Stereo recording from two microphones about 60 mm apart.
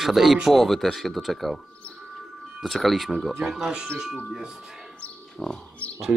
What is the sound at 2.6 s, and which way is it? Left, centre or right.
Speech, centre.